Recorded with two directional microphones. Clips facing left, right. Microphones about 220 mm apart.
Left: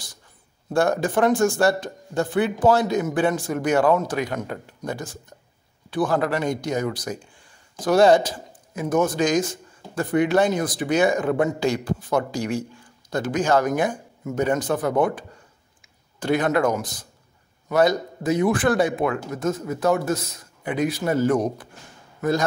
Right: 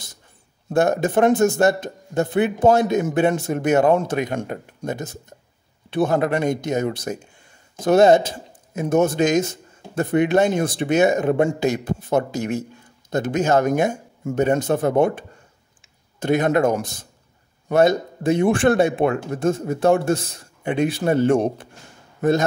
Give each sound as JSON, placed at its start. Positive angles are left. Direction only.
{"t": 0.7, "sound": "speech", "side_deg": -20}